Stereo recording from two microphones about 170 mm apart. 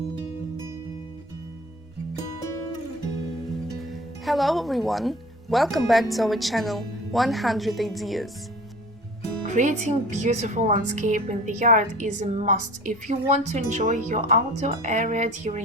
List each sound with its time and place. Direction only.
2.1 s music: 20° left (ahead or behind)
3.7 s speech: centre (ahead or behind)
9.5 s speech: 45° right (ahead or behind)